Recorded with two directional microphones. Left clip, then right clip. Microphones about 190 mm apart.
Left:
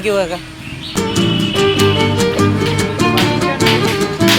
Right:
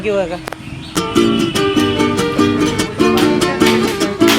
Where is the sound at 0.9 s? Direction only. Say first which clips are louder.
Right 3 dB; centre (ahead or behind).